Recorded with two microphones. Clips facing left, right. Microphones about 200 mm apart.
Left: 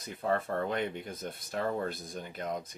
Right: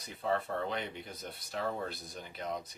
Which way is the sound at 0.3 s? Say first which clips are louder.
Left 3 dB; 50° left (ahead or behind).